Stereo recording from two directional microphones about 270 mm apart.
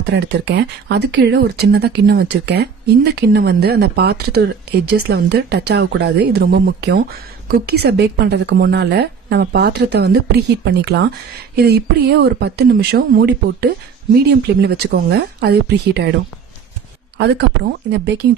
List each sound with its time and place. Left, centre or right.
0.1 s speech: right
17.2 s speech: right